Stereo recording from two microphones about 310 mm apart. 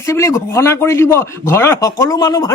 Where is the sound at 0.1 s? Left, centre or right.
Centre.